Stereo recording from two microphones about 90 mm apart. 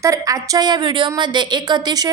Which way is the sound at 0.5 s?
55° right (ahead or behind).